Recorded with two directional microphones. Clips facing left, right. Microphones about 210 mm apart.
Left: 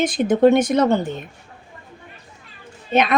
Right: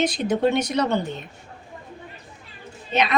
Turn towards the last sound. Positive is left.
turn(degrees=50)  # may be behind; listen again after turning